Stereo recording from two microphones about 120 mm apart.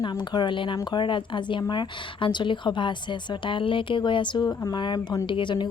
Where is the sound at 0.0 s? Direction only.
35° left (ahead or behind).